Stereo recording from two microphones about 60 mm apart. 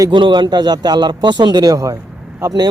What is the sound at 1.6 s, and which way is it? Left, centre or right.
Speech, right.